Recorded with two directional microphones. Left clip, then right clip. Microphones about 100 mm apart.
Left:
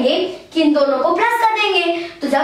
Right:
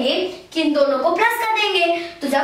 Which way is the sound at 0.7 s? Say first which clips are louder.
Left 1 dB; centre (ahead or behind).